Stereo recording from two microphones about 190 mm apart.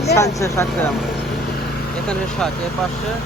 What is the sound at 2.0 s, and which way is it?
Speech, 5° left (ahead or behind).